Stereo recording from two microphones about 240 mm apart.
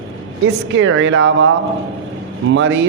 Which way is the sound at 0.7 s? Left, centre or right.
Right.